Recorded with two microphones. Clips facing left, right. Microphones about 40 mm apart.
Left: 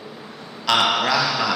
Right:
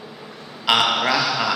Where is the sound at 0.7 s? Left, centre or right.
Centre.